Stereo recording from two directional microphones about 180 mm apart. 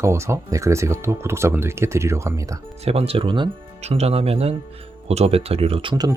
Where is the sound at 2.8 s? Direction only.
35° right (ahead or behind).